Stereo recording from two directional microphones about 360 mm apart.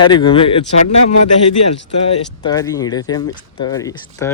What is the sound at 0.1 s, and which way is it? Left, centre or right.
Speech, centre.